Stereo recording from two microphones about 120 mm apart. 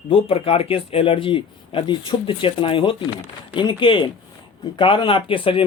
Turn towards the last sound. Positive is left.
turn(degrees=45)  # may be behind; listen again after turning